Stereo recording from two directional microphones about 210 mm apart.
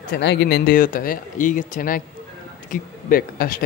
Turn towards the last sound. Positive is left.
turn(degrees=40)  # may be behind; listen again after turning